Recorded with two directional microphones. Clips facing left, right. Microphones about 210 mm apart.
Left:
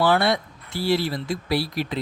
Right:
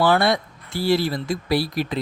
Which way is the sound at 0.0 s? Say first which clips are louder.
Right 2 dB; 45° right (ahead or behind).